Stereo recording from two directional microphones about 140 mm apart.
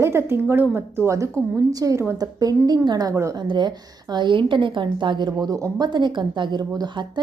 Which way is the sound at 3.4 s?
30° right (ahead or behind).